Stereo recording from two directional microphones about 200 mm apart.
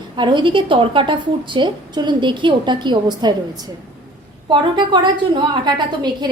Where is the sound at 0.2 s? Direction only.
25° right (ahead or behind).